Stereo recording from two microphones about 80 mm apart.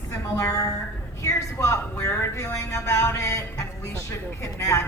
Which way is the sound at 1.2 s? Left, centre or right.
Left.